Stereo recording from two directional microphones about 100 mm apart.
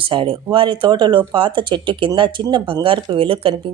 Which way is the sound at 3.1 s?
65° right (ahead or behind).